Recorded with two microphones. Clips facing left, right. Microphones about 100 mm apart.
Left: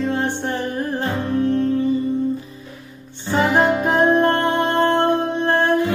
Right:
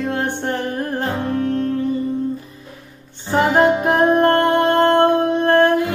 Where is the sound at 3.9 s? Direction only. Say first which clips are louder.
Right 2 dB; 55° right (ahead or behind).